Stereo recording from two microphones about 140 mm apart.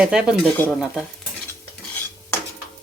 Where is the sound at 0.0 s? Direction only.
5° right (ahead or behind).